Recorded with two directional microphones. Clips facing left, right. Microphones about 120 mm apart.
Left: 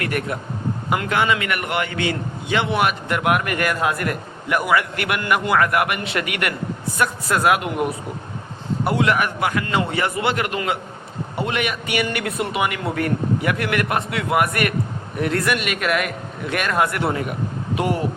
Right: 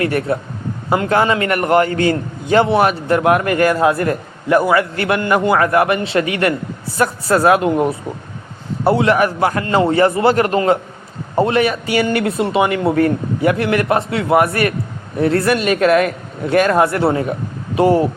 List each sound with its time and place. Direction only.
0.0 s a man's voice: 30° right (ahead or behind)